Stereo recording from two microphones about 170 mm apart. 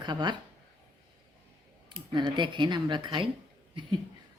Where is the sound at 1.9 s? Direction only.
30° right (ahead or behind).